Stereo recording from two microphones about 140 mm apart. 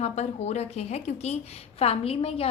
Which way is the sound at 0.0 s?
50° left (ahead or behind).